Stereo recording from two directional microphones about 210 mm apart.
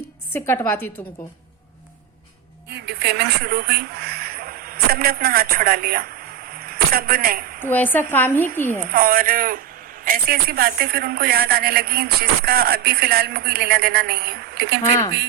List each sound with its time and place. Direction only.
0.3 s a woman's voice: 10° left (ahead or behind)
2.6 s speech: 55° right (ahead or behind)
6.5 s a sound: 45° right (ahead or behind)
7.6 s a woman's voice: 10° left (ahead or behind)
8.9 s a man's voice: 45° right (ahead or behind)